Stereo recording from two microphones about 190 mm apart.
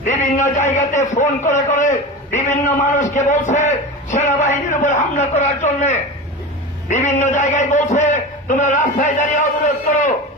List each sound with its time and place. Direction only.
0.0 s a man's voice: 40° left (ahead or behind)